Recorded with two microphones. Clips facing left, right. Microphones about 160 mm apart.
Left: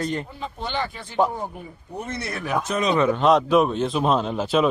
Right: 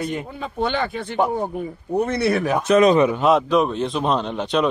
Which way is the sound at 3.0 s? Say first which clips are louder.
Right 1 dB; 5° right (ahead or behind).